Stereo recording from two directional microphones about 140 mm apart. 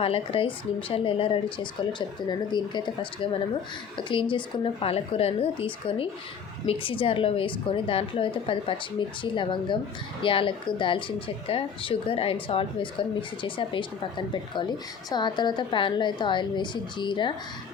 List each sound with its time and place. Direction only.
0.0 s speech: 40° left (ahead or behind)